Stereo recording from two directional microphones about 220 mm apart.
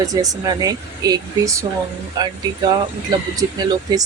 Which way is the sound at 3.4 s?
20° right (ahead or behind).